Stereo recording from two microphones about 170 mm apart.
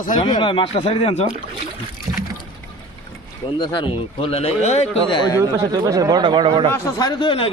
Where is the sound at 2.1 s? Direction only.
25° right (ahead or behind).